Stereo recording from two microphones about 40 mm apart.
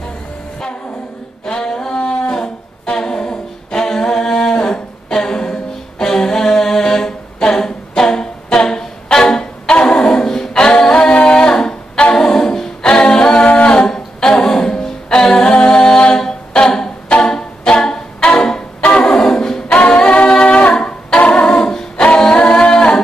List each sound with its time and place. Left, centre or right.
1.4 s a sound: centre
2.0 s a sound: left
2.3 s humming: centre
4.6 s music: centre
11.2 s a capella: left
13.4 s humming: left
13.7 s music: centre
15.3 s a capella: left
17.2 s music: centre
19.1 s a capella: centre
19.7 s a capella: left
21.5 s a capella: centre
22.5 s a capella: left